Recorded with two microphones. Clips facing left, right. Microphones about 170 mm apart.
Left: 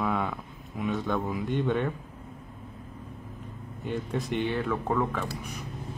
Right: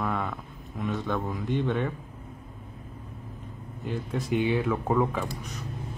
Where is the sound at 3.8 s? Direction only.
Centre (ahead or behind).